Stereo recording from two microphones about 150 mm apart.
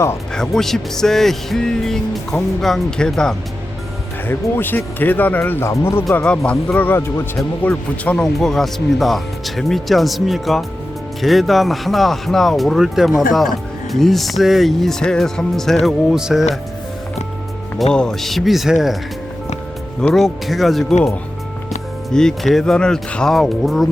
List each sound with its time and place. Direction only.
0.3 s speech: 5° left (ahead or behind)
17.9 s speech: 5° left (ahead or behind)
20.0 s speech: 5° left (ahead or behind)
22.1 s speech: 5° left (ahead or behind)